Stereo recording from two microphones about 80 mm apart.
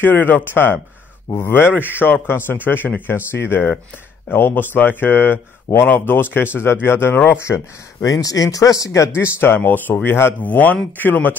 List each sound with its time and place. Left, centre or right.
0.0 s speech: left
7.4 s speech: left
8.1 s speech: left